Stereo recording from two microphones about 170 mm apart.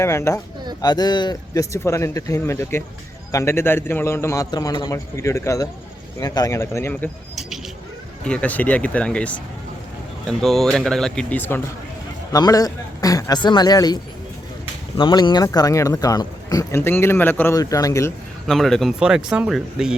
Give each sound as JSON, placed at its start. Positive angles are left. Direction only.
{"t": 0.0, "sound": "a man's voice", "side_deg": 15}
{"t": 8.2, "sound": "a man's voice", "side_deg": 5}
{"t": 12.3, "sound": "speech", "side_deg": 20}
{"t": 18.4, "sound": "speech", "side_deg": 0}